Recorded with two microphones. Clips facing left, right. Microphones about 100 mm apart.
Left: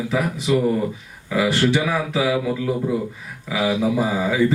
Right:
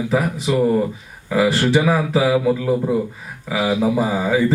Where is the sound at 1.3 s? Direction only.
40° right (ahead or behind).